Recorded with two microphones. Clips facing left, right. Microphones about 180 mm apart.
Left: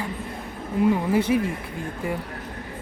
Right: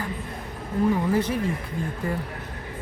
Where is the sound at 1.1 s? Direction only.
10° left (ahead or behind).